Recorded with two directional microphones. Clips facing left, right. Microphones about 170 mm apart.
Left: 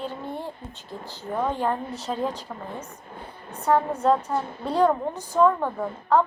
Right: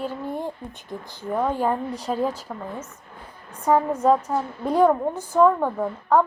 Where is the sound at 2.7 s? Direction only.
30° left (ahead or behind).